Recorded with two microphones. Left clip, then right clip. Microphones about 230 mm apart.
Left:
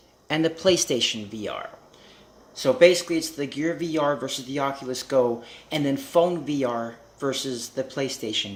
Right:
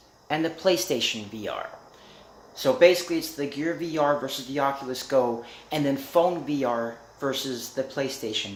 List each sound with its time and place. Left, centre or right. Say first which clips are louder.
0.3 s speech: left 2 dB; left